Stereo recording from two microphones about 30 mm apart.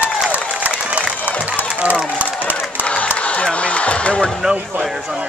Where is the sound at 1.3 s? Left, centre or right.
Right.